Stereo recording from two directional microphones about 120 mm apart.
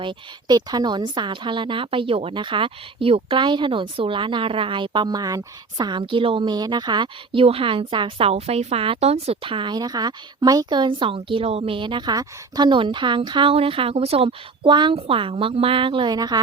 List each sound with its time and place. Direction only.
0.0 s a woman's voice: 40° right (ahead or behind)